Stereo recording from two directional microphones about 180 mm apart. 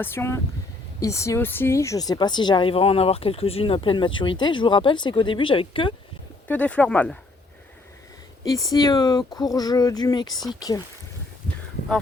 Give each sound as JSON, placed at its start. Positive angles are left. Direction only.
{"t": 0.0, "sound": "speech", "side_deg": 15}
{"t": 6.5, "sound": "speech", "side_deg": 10}
{"t": 8.4, "sound": "speech", "side_deg": 20}